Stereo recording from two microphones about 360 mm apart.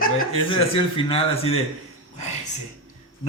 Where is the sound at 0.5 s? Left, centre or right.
Centre.